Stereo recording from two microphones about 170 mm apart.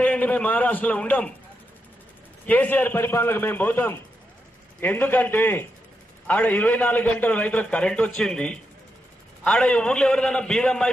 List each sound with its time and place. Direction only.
0.0 s a man's voice: 10° left (ahead or behind)
2.4 s a man's voice: 10° left (ahead or behind)